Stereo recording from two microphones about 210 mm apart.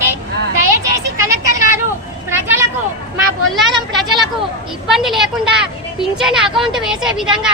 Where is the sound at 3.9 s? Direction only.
Centre (ahead or behind).